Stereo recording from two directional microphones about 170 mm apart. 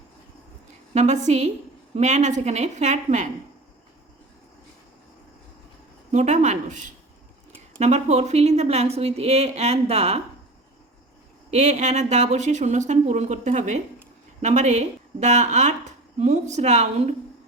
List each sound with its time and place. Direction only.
0.9 s a woman's voice: 45° right (ahead or behind)
6.1 s a woman's voice: 45° right (ahead or behind)
11.5 s a woman's voice: 45° right (ahead or behind)